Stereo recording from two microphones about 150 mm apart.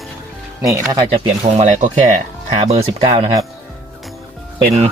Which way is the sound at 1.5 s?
50° right (ahead or behind).